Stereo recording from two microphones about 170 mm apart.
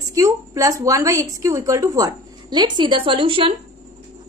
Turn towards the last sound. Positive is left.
turn(degrees=-30)  # may be behind; listen again after turning